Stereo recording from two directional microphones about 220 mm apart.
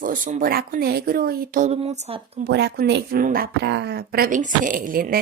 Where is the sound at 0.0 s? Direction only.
35° right (ahead or behind).